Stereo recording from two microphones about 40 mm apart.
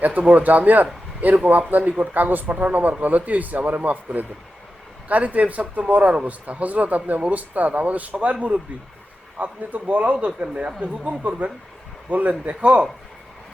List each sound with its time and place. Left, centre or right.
0.0 s speech: right
12.5 s speech: right